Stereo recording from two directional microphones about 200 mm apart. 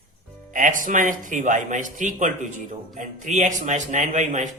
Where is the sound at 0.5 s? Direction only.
40° right (ahead or behind).